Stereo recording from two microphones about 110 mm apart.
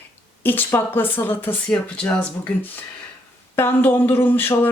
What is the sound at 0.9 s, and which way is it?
Speech, 20° left (ahead or behind).